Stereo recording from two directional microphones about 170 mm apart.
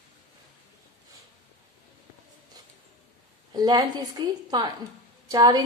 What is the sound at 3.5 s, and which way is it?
A woman's voice, 25° right (ahead or behind).